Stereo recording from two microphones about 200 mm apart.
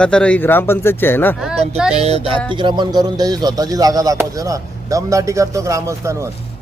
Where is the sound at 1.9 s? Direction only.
30° right (ahead or behind); by 6.2 s 15° right (ahead or behind).